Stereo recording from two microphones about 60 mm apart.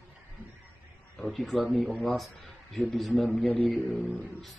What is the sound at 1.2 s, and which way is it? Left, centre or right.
Speech, centre.